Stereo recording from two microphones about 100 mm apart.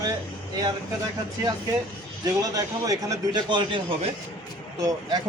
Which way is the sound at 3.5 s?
50° right (ahead or behind).